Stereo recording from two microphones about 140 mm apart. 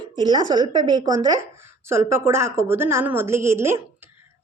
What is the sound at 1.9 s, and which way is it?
Speech, 20° right (ahead or behind).